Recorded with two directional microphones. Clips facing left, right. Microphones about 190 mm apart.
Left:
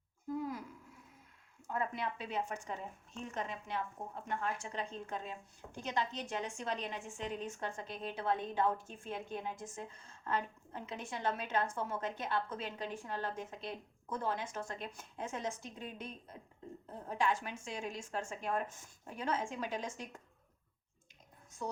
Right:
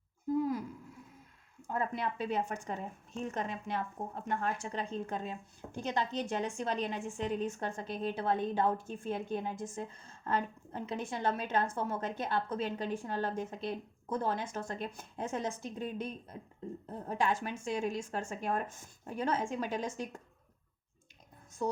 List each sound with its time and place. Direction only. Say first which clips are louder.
1.6 s a woman's voice: right 3 dB; 35° right (ahead or behind)
21.6 s a woman's voice: right 7 dB; 35° right (ahead or behind)